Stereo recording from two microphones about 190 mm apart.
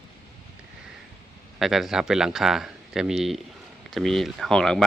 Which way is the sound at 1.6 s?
Centre (ahead or behind).